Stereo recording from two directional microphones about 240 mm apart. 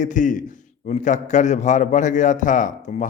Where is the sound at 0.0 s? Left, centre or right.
Left.